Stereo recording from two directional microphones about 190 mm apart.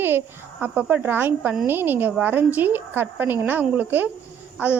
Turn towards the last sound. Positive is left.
turn(degrees=-10)  # may be behind; listen again after turning